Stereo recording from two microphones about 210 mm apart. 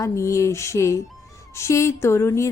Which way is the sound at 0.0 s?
15° left (ahead or behind).